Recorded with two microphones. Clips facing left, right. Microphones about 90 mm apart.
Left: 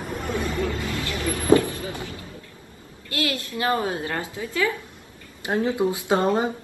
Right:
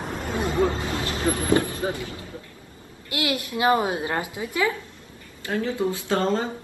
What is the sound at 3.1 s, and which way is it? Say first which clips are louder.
A woman's voice: right 1 dB; 20° right (ahead or behind).